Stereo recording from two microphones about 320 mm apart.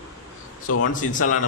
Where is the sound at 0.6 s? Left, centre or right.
Left.